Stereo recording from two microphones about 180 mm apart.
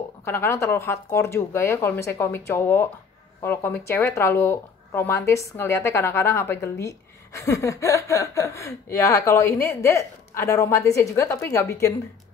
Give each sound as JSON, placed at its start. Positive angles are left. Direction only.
{"t": 0.2, "sound": "speech", "side_deg": 15}